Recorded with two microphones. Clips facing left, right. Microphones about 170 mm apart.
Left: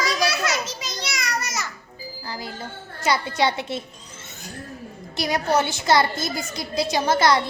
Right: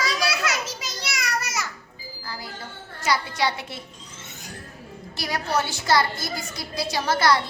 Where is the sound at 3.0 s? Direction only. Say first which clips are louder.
Left 3 dB; 25° left (ahead or behind).